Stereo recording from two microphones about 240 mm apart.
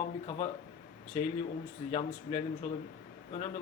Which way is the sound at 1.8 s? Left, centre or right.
Left.